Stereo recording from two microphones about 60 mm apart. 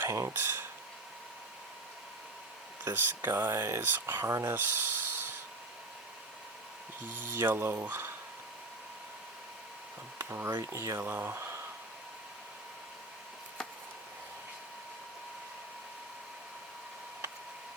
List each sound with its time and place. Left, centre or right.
0.1 s speech: right
2.8 s speech: right
4.5 s speech: right
7.2 s speech: right
10.2 s speech: right
10.6 s speech: right